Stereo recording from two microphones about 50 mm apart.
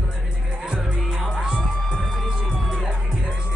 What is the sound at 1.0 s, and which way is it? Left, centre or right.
Music, centre.